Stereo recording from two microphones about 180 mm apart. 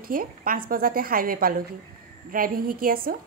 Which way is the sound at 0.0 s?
50° right (ahead or behind).